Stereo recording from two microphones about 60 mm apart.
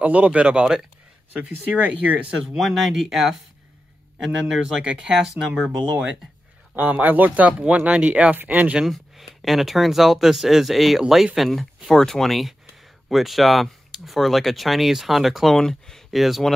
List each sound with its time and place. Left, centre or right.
0.0 s speech: right
1.8 s speech: right
2.3 s speech: centre
6.7 s speech: right
8.9 s speech: centre
15.5 s speech: centre